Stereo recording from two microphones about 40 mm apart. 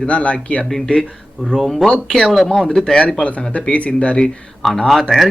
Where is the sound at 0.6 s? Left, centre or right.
Centre.